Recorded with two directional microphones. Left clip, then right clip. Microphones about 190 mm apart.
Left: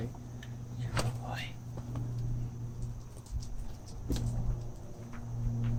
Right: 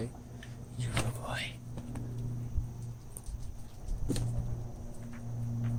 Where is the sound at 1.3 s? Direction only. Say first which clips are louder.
Right 3 dB; 50° right (ahead or behind).